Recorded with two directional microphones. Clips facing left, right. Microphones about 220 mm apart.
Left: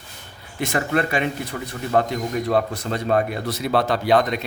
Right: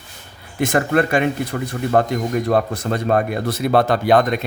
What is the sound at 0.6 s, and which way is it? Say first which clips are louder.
Speech: right 5 dB; 50° right (ahead or behind).